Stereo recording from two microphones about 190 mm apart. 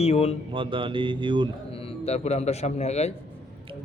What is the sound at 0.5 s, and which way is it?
Speech, 25° right (ahead or behind).